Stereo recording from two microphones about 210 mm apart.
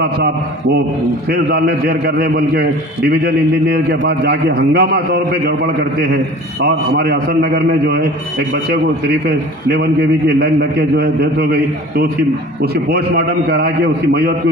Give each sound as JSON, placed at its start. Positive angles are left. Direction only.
{"t": 1.3, "sound": "a man's voice", "side_deg": -50}
{"t": 9.7, "sound": "a man's voice", "side_deg": -50}